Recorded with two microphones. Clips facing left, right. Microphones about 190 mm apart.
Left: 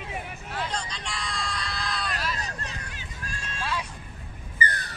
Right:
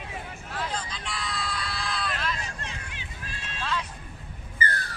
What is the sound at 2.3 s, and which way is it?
Run, 40° left (ahead or behind).